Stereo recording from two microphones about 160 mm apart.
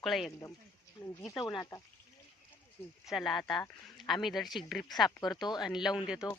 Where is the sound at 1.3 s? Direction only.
25° left (ahead or behind).